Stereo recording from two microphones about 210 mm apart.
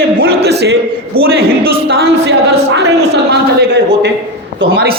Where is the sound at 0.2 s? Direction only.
50° right (ahead or behind).